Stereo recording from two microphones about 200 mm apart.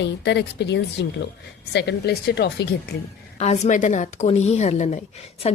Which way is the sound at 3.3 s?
35° left (ahead or behind).